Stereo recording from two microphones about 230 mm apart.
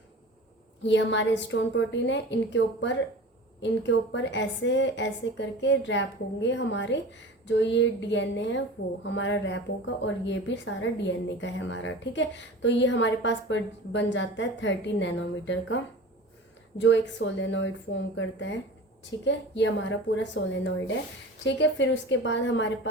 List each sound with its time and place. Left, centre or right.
0.8 s speech: left
16.8 s speech: left